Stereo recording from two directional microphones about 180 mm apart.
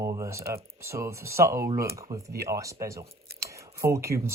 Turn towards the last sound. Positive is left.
turn(degrees=-15)  # may be behind; listen again after turning